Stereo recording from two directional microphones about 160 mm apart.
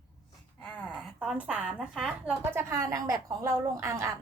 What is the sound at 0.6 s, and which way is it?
A woman's voice, 5° left (ahead or behind).